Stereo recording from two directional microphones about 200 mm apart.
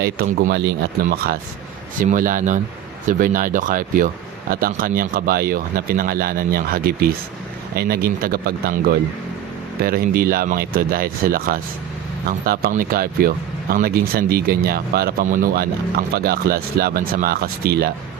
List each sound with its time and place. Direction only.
0.0 s speech: 50° right (ahead or behind)
0.5 s speech: 60° right (ahead or behind)
1.0 s speech: 50° right (ahead or behind)